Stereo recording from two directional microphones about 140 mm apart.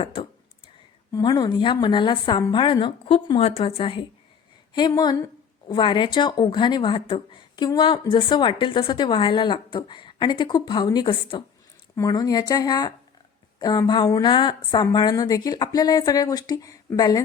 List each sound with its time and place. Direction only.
0.0 s speech: 40° left (ahead or behind)
4.7 s speech: 30° left (ahead or behind)